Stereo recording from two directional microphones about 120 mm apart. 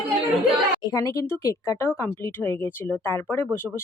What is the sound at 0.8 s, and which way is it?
Speech, 30° left (ahead or behind).